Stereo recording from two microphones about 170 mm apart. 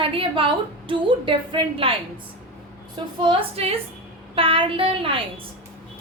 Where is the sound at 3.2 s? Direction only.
35° right (ahead or behind).